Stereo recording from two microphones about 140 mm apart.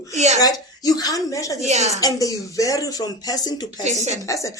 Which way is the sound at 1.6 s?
50° right (ahead or behind).